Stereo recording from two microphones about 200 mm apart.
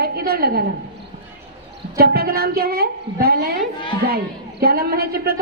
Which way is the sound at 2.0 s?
50° right (ahead or behind).